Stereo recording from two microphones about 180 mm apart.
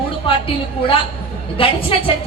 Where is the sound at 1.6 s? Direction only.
30° left (ahead or behind).